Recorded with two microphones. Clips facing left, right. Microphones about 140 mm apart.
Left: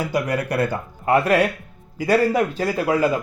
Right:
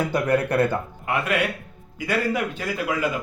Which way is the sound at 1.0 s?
35° left (ahead or behind).